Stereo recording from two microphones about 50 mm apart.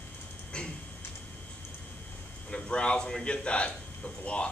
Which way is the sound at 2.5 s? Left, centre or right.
Left.